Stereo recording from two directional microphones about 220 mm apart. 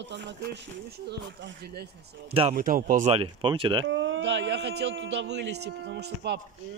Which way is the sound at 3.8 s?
60° right (ahead or behind).